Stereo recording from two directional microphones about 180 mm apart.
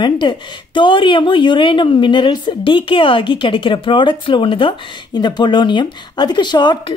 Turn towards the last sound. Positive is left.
turn(degrees=25)  # may be behind; listen again after turning